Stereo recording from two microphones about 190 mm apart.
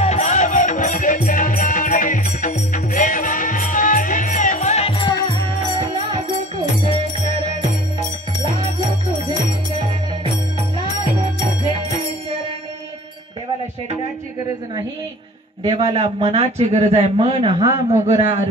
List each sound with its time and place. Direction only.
0.0 s music: 35° left (ahead or behind)
5.8 s music: 25° right (ahead or behind)
15.6 s a man's voice: 30° right (ahead or behind)